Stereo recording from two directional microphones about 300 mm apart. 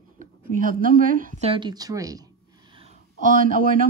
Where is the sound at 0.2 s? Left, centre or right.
Right; by 2.2 s centre.